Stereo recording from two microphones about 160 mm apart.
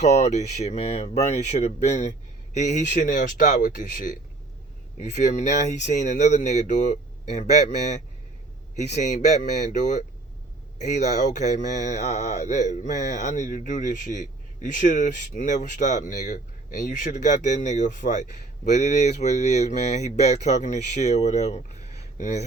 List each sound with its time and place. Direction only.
0.0 s speech: 45° left (ahead or behind)
9.0 s speech: 50° left (ahead or behind)